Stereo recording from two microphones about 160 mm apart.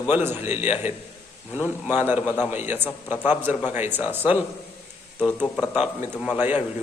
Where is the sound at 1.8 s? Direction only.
10° right (ahead or behind).